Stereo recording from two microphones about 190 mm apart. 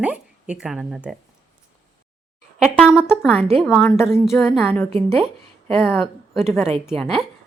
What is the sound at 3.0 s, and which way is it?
Speech, 10° left (ahead or behind).